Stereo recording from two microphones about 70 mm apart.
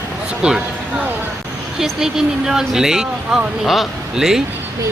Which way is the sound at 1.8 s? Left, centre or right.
Centre.